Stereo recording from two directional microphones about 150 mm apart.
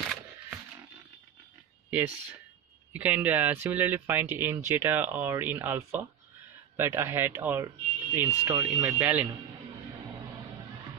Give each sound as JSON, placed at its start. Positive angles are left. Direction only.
{"t": 1.9, "sound": "speech", "side_deg": -10}